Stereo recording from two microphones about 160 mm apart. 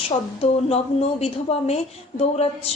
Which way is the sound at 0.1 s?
40° left (ahead or behind).